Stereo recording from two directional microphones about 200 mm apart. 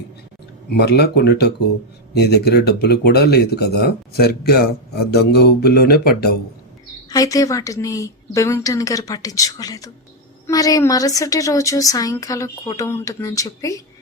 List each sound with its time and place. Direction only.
0.7 s speech: 55° left (ahead or behind)
7.1 s a woman's voice: 15° left (ahead or behind)